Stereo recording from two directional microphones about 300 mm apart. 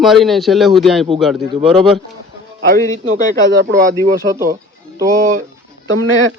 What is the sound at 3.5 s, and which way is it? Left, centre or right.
Speech, right.